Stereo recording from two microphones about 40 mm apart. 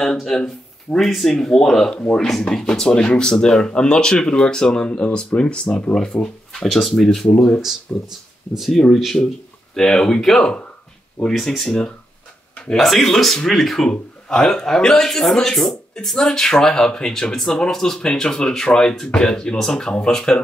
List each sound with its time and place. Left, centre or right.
0.0 s speech: centre
0.9 s speech: centre; by 5.9 s left
6.1 s speech: left
6.5 s speech: centre
7.3 s speech: left
7.9 s speech: left
8.7 s speech: centre
12.7 s speech: centre